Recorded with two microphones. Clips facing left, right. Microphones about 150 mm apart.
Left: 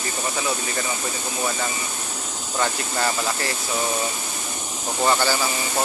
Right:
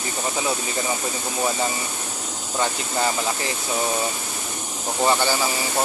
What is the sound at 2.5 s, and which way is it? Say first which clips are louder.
Speech: right 1 dB; 15° right (ahead or behind).